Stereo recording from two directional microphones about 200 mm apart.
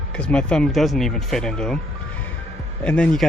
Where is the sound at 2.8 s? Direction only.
5° left (ahead or behind).